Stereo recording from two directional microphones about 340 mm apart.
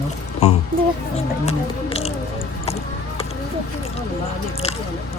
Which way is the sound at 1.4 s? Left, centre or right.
Centre.